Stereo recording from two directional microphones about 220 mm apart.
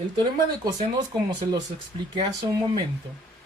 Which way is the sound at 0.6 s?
20° right (ahead or behind).